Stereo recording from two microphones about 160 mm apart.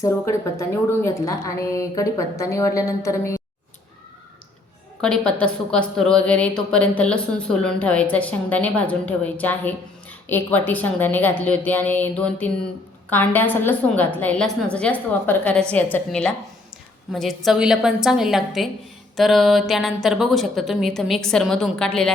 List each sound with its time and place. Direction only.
0.0 s a woman's voice: 20° left (ahead or behind)
4.9 s a woman's voice: 5° left (ahead or behind)